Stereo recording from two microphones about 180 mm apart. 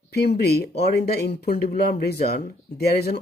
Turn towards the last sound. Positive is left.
turn(degrees=60)  # may be behind; listen again after turning